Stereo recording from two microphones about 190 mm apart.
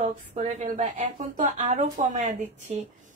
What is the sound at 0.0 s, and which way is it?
A woman's voice, 35° right (ahead or behind).